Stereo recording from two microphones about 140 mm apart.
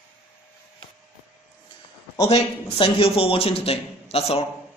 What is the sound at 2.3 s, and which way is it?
A man's voice, 40° left (ahead or behind).